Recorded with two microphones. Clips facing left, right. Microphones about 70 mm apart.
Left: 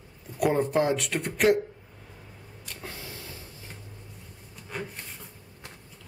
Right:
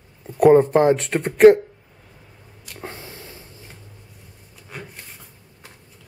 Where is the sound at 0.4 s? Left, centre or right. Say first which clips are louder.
Right 11 dB; right.